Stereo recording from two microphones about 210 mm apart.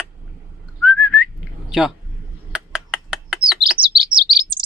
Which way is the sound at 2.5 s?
5° right (ahead or behind).